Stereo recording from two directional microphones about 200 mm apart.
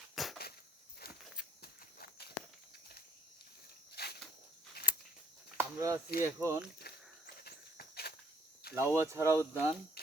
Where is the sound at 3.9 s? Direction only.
50° left (ahead or behind).